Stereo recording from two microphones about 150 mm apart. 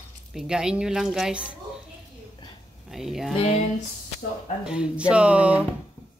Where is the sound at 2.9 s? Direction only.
Centre (ahead or behind).